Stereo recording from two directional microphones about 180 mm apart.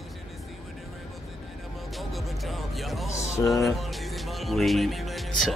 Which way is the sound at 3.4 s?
Centre (ahead or behind).